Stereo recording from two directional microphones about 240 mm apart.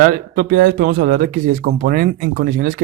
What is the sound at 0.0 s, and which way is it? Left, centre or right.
Speech, right.